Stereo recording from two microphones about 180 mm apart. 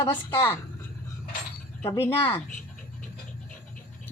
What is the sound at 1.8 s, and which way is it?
Speech, 15° left (ahead or behind).